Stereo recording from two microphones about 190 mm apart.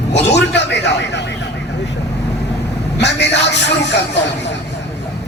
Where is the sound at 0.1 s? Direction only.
65° left (ahead or behind).